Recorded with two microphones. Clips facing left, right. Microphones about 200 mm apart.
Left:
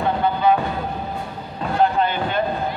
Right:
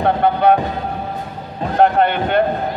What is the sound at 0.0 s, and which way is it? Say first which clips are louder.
Music: right 4 dB; 65° right (ahead or behind).